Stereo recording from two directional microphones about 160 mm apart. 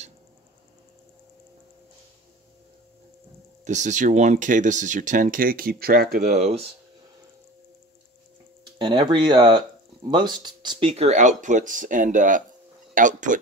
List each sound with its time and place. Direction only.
3.6 s speech: 50° right (ahead or behind); by 6.0 s 70° right (ahead or behind)
6.1 s speech: 50° right (ahead or behind)
8.7 s speech: 30° right (ahead or behind); by 13.4 s 55° right (ahead or behind)